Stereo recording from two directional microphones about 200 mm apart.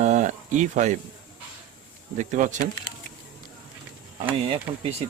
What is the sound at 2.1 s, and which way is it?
Speech, 40° right (ahead or behind).